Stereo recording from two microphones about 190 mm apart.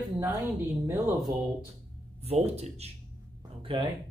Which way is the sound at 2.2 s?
30° right (ahead or behind).